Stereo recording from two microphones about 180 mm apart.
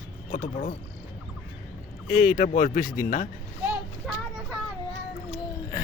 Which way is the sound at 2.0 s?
55° left (ahead or behind).